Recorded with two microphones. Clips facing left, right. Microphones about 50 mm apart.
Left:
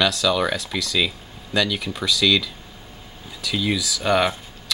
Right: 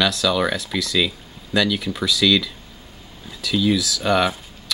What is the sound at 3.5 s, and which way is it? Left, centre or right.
Speech, centre.